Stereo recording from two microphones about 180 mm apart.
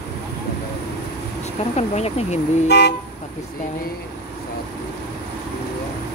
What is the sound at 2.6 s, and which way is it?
Speech, 65° left (ahead or behind).